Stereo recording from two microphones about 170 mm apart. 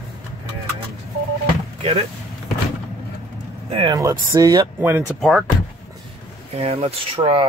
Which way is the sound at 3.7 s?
30° right (ahead or behind).